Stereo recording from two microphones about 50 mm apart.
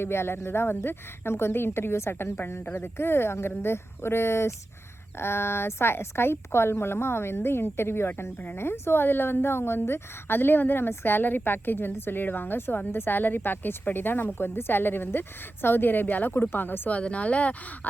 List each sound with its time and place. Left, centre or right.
0.0 s a woman's voice: left
16.9 s speech: left